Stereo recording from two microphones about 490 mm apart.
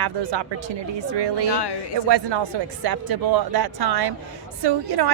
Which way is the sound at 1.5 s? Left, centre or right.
Left.